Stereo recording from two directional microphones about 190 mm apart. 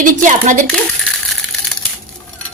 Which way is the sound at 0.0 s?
40° right (ahead or behind).